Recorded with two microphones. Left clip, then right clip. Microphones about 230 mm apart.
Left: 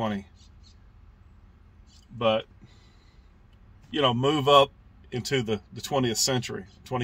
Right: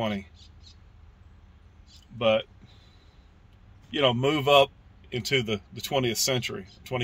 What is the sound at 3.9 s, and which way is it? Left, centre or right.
A man's voice, centre.